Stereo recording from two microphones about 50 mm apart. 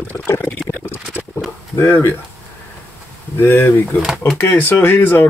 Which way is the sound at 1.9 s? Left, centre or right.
Left.